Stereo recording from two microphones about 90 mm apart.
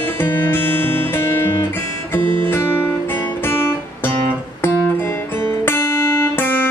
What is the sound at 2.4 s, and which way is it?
Guitar, 25° left (ahead or behind).